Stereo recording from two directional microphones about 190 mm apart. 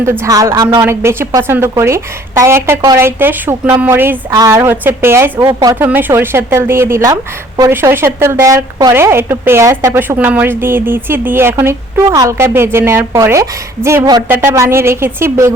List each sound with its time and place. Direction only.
0.0 s a woman's voice: 15° right (ahead or behind)